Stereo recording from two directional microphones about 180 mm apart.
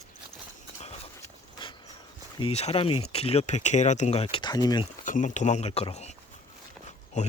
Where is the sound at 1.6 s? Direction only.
25° left (ahead or behind).